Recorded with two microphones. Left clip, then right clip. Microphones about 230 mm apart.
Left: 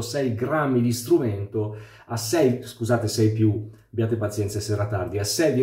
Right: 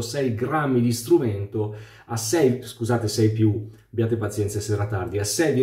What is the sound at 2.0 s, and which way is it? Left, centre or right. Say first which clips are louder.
Speech: even; centre.